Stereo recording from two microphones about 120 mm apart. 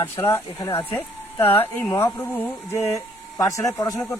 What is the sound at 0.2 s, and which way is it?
Speech, 20° left (ahead or behind).